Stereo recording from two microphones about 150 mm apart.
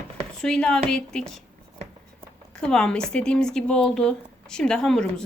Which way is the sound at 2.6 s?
5° left (ahead or behind).